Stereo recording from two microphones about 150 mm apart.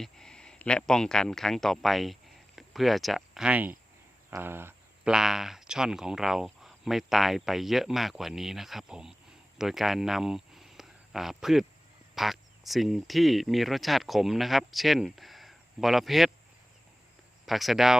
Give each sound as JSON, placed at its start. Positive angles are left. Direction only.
{"t": 0.0, "sound": "speech", "side_deg": 5}
{"t": 4.3, "sound": "a sound", "side_deg": -15}
{"t": 5.1, "sound": "speech", "side_deg": -5}
{"t": 17.4, "sound": "speech", "side_deg": 0}